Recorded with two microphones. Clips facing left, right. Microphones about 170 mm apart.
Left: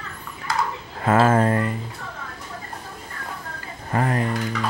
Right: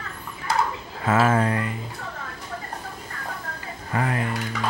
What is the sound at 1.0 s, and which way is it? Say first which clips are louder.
Speech: left 3 dB; 50° left (ahead or behind).